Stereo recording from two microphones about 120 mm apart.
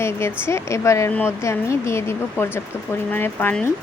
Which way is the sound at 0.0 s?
20° left (ahead or behind).